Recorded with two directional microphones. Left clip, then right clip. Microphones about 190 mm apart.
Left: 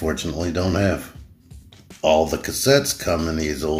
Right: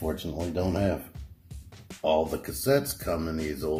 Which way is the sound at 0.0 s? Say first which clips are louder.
Left 8 dB; centre (ahead or behind).